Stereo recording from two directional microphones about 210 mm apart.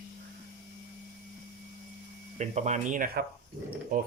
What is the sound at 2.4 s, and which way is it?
Speech, 35° right (ahead or behind).